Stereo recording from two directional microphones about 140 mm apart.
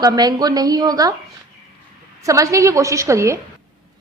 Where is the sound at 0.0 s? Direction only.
30° right (ahead or behind).